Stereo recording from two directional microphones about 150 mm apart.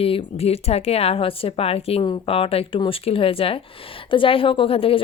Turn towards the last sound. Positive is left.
turn(degrees=40)  # may be behind; listen again after turning